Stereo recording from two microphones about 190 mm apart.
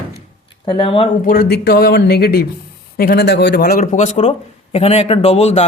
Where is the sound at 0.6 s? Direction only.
25° left (ahead or behind).